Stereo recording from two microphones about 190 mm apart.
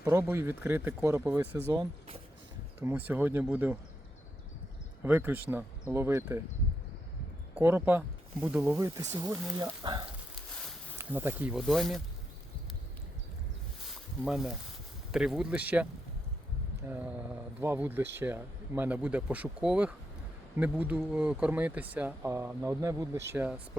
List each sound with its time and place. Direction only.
0.0 s speech: 10° right (ahead or behind)
2.8 s speech: 10° right (ahead or behind)
5.0 s speech: 10° right (ahead or behind)
7.5 s speech: 10° right (ahead or behind)
9.0 s speech: 20° right (ahead or behind)
10.5 s a sound: centre (ahead or behind)
10.9 s speech: 10° right (ahead or behind)
14.3 s speech: 5° right (ahead or behind)
16.9 s speech: 10° right (ahead or behind)